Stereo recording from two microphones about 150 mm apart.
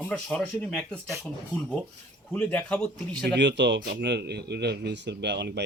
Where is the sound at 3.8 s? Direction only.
90° right.